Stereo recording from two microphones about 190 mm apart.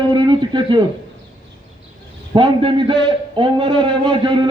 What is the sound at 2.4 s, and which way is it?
A man's voice, 25° right (ahead or behind).